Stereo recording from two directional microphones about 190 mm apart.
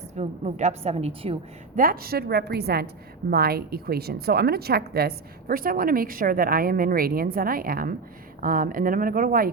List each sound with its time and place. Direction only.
0.2 s a woman's voice: 35° right (ahead or behind)
1.7 s a woman's voice: 50° right (ahead or behind)